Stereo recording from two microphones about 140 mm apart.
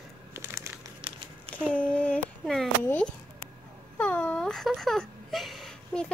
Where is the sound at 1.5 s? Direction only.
10° left (ahead or behind).